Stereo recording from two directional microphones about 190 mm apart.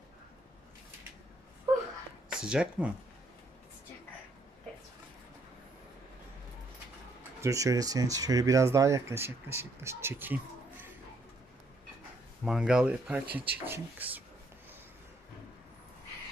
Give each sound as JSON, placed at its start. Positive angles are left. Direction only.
{"t": 2.4, "sound": "speech", "side_deg": -5}
{"t": 7.4, "sound": "speech", "side_deg": -15}
{"t": 12.5, "sound": "speech", "side_deg": -5}